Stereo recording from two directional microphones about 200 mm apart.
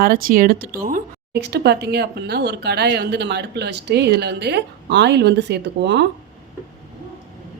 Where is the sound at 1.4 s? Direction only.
55° right (ahead or behind).